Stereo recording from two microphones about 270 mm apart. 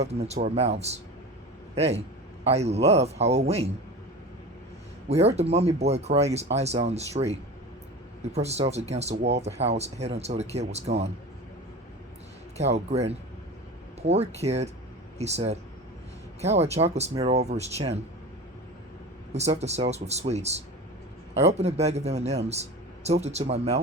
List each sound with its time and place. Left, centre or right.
0.0 s a man's voice: right
5.0 s speech: right
12.5 s speech: right
19.3 s speech: right